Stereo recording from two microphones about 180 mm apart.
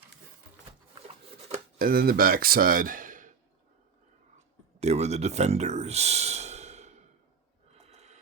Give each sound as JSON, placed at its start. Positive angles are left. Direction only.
{"t": 1.8, "sound": "speech", "side_deg": -55}
{"t": 4.8, "sound": "a sound", "side_deg": -40}
{"t": 7.9, "sound": "snort", "side_deg": -35}